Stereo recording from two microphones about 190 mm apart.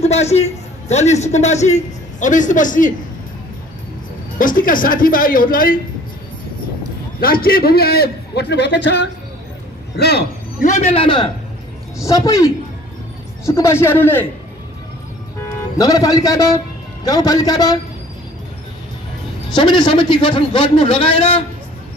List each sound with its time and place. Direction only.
0.0 s a man's voice: 35° left (ahead or behind)
4.4 s speech: 45° left (ahead or behind)
7.2 s a man's voice: 50° left (ahead or behind)
10.6 s a man's voice: 35° left (ahead or behind)
12.0 s speech: 15° left (ahead or behind)
13.5 s speech: 15° left (ahead or behind)
15.8 s speech: 20° left (ahead or behind)
19.5 s a man's voice: 25° left (ahead or behind)